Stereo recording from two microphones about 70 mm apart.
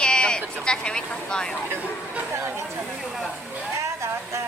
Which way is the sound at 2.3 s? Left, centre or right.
Right.